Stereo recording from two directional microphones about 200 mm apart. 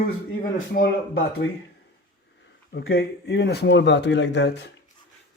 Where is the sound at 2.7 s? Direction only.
60° left (ahead or behind).